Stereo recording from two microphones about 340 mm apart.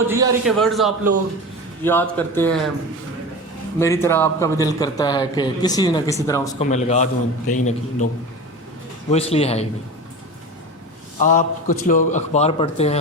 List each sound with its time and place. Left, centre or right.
0.1 s speech: centre
3.8 s a man's voice: centre
9.0 s a man's voice: centre
11.2 s a man's voice: left